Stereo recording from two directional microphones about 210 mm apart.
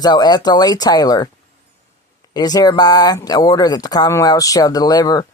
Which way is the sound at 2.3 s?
20° left (ahead or behind).